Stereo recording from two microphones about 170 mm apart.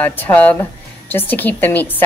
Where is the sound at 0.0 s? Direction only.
10° left (ahead or behind).